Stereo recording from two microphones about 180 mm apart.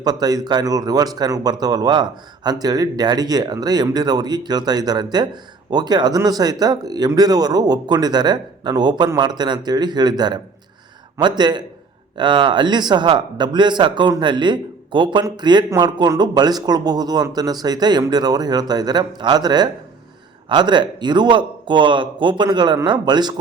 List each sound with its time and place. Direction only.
0.0 s a man's voice: 20° right (ahead or behind)